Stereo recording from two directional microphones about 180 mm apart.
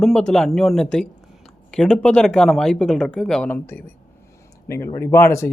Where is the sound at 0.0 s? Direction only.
5° left (ahead or behind).